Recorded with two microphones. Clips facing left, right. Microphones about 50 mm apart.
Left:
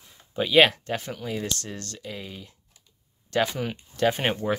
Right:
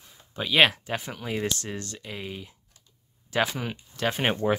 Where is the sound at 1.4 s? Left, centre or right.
Centre.